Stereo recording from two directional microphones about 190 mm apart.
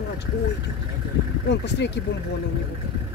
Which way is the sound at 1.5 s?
65° left (ahead or behind).